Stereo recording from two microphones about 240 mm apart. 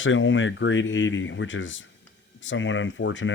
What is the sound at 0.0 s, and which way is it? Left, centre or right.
Speech, left.